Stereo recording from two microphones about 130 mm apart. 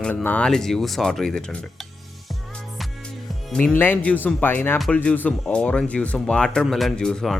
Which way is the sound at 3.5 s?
10° left (ahead or behind).